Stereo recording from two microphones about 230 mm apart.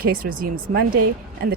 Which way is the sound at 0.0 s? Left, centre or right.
Right.